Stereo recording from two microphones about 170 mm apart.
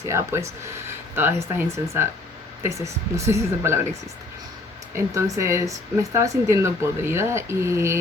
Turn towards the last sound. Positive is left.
turn(degrees=-15)  # may be behind; listen again after turning